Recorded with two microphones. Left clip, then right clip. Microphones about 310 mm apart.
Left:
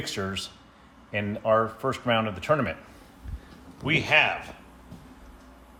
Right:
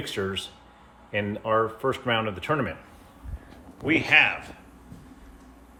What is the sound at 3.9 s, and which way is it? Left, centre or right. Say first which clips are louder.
Speech: right 2 dB; centre.